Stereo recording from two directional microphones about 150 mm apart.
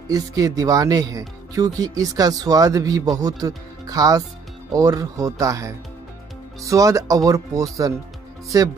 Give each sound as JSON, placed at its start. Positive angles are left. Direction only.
{"t": 0.1, "sound": "speech", "side_deg": -25}